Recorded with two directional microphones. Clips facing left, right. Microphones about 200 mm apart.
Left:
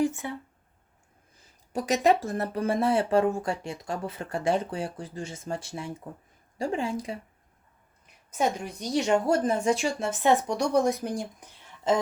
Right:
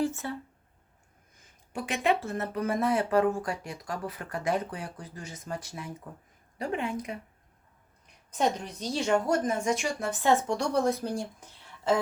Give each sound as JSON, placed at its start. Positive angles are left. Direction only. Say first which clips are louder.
{"t": 0.0, "sound": "speech", "louder": "left 3 dB", "side_deg": 15}
{"t": 1.4, "sound": "speech", "louder": "left 5 dB", "side_deg": 35}
{"t": 8.3, "sound": "speech", "louder": "left 1 dB", "side_deg": 10}